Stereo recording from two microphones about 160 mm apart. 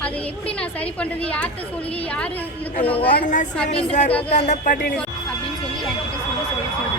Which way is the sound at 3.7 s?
45° left (ahead or behind).